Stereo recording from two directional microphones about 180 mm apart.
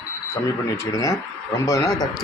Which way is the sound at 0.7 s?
15° left (ahead or behind).